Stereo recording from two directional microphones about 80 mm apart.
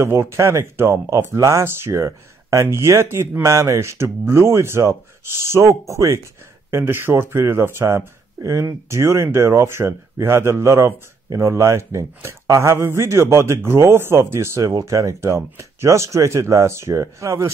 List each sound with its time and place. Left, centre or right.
0.0 s speech: right
6.7 s speech: right
14.7 s speech: right